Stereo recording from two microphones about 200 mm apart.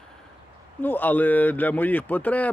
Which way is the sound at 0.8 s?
10° left (ahead or behind).